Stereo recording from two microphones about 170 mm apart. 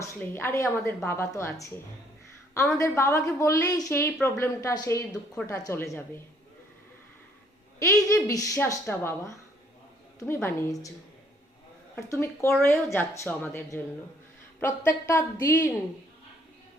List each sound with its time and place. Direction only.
0.0 s a woman's voice: 15° left (ahead or behind)
2.7 s a woman's voice: 15° left (ahead or behind)
7.8 s a woman's voice: 15° left (ahead or behind)
11.9 s a woman's voice: 15° left (ahead or behind)